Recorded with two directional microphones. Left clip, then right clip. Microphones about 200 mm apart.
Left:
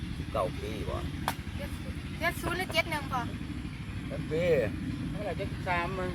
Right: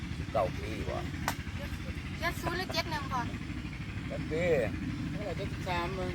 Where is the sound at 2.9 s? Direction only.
15° left (ahead or behind).